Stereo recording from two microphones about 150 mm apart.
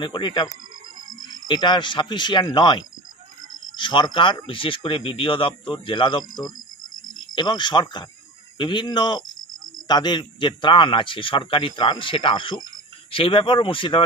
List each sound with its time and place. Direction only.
0.0 s speech: 30° left (ahead or behind)
1.5 s speech: 30° left (ahead or behind)